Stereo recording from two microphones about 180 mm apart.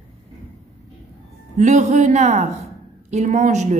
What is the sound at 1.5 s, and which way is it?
A woman's voice, 40° right (ahead or behind).